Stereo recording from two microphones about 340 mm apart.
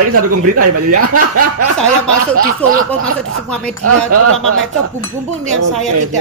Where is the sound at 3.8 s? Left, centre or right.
Right.